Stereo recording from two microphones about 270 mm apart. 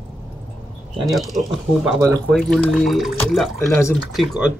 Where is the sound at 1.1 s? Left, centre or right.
Centre.